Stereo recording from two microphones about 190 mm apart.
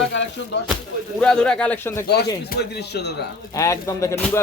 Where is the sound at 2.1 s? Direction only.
60° left (ahead or behind).